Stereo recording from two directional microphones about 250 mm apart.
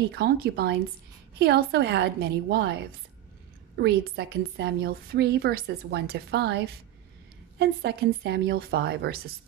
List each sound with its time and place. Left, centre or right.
0.1 s a woman's voice: right